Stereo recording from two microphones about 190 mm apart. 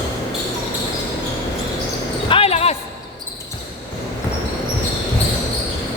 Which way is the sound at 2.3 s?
30° left (ahead or behind).